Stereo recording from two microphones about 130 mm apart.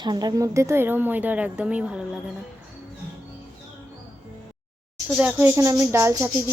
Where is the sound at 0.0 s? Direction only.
30° right (ahead or behind); by 2.0 s 10° right (ahead or behind).